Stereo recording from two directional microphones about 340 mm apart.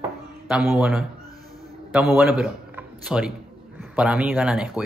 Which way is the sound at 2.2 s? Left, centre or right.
Centre.